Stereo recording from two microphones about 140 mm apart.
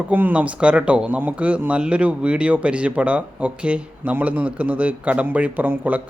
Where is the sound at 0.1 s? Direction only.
15° right (ahead or behind).